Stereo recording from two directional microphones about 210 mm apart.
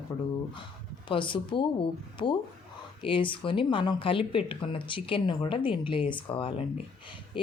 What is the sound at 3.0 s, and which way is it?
Speech, 25° left (ahead or behind).